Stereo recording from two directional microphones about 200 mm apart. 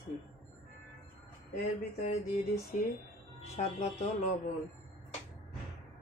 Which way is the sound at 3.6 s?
35° left (ahead or behind).